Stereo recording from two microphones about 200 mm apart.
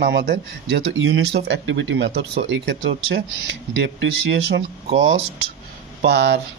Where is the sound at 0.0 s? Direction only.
50° right (ahead or behind).